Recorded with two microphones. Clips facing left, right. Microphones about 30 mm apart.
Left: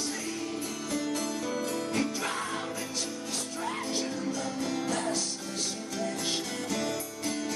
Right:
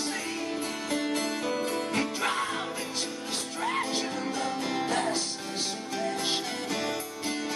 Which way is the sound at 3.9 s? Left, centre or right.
Right.